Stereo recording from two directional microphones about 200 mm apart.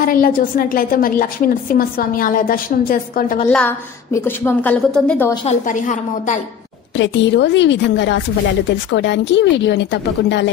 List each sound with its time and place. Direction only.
0.0 s a woman's voice: 45° left (ahead or behind)
3.4 s a woman's voice: 10° left (ahead or behind)
5.3 s a woman's voice: 25° left (ahead or behind)
5.7 s a woman's voice: 40° left (ahead or behind)
7.0 s a woman's voice: 60° left (ahead or behind)